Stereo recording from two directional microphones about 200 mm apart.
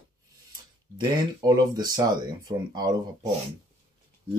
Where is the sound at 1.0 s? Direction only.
20° right (ahead or behind).